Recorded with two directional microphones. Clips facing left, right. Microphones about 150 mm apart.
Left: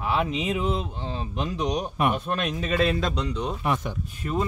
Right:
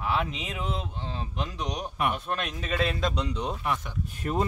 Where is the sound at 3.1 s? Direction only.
15° right (ahead or behind).